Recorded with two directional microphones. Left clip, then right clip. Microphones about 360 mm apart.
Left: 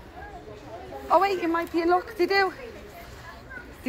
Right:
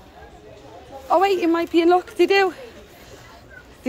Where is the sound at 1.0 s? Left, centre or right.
Centre.